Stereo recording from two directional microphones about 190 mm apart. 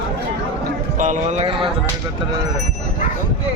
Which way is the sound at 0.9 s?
40° right (ahead or behind).